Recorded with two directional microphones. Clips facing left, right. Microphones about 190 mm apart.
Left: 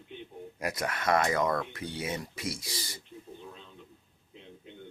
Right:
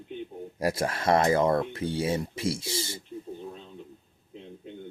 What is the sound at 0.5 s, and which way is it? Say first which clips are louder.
Speech: right 6 dB; 30° right (ahead or behind).